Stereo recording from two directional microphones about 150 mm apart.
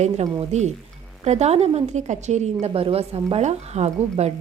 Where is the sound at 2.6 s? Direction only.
40° right (ahead or behind).